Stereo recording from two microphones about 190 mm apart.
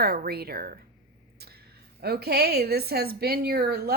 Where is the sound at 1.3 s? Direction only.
55° right (ahead or behind).